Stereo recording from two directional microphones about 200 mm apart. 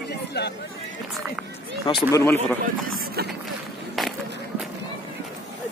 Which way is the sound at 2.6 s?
45° right (ahead or behind).